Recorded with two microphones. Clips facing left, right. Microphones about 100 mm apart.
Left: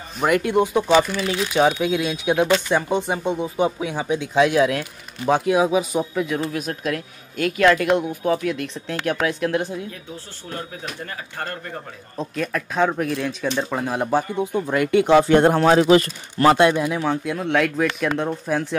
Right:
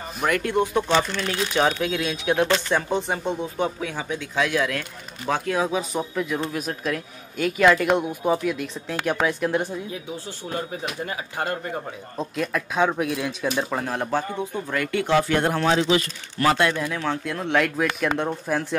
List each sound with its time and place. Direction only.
0.2 s a man's voice: 15° left (ahead or behind)
12.2 s a man's voice: centre (ahead or behind)
14.1 s speech: 15° left (ahead or behind); by 16.1 s 45° left (ahead or behind)
16.3 s a man's voice: 25° left (ahead or behind); by 18.8 s centre (ahead or behind)